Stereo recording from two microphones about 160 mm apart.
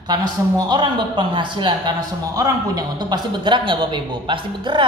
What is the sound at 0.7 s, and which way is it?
A man's voice, 30° right (ahead or behind).